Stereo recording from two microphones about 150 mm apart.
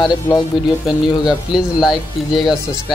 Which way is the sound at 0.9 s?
Centre (ahead or behind).